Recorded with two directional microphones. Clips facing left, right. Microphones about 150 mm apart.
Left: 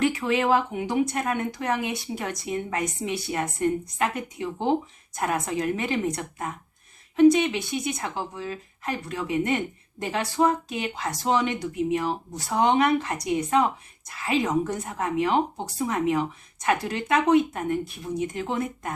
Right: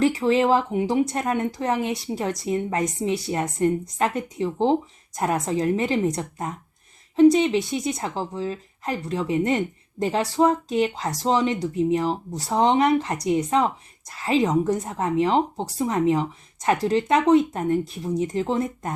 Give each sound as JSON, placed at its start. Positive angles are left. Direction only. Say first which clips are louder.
{"t": 0.0, "sound": "speech", "louder": "right 4 dB", "side_deg": -35}
{"t": 14.2, "sound": "speech", "louder": "right 3 dB", "side_deg": -30}